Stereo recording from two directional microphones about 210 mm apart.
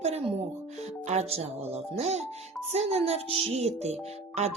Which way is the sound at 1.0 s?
30° right (ahead or behind).